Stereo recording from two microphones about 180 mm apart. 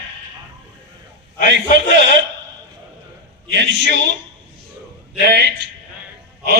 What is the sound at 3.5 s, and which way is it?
Speech, 80° right.